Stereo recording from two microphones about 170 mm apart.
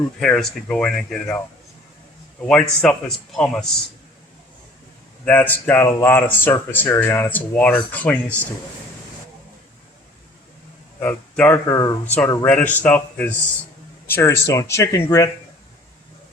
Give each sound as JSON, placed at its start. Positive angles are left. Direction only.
{"t": 0.2, "sound": "speech", "side_deg": 5}
{"t": 2.5, "sound": "speech", "side_deg": 5}
{"t": 5.2, "sound": "speech", "side_deg": 10}
{"t": 11.0, "sound": "speech", "side_deg": 10}
{"t": 11.6, "sound": "speech", "side_deg": 20}